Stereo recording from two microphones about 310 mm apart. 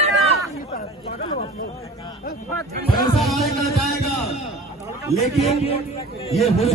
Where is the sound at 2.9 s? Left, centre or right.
Centre.